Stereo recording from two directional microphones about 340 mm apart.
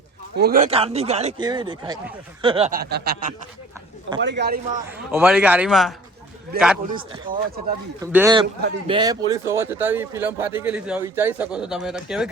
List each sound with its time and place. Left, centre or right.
0.4 s speech: right
5.1 s speech: centre
6.5 s speech: right
8.0 s speech: centre